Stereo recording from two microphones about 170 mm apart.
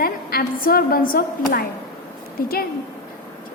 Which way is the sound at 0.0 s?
60° left (ahead or behind).